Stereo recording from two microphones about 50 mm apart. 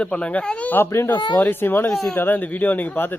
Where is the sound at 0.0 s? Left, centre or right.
Left.